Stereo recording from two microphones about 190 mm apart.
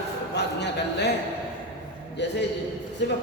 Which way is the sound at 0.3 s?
60° left (ahead or behind).